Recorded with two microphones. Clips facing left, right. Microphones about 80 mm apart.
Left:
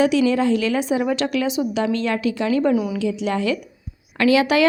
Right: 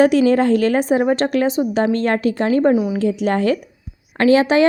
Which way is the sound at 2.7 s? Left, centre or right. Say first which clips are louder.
Right 3 dB; right.